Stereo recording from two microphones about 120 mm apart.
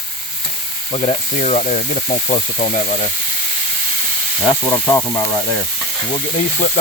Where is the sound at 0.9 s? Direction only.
65° left (ahead or behind); by 2.6 s 80° left.